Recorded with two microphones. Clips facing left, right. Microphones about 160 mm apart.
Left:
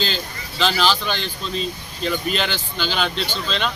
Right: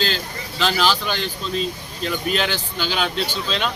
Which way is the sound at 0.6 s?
5° right (ahead or behind).